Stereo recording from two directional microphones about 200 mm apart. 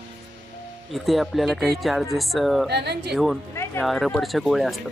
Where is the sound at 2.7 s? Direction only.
55° right (ahead or behind).